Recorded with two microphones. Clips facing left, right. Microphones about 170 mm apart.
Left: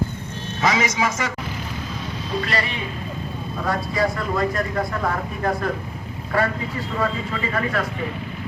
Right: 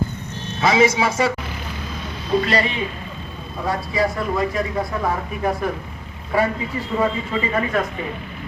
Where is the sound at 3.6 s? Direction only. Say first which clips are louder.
Right 1 dB; 10° right (ahead or behind).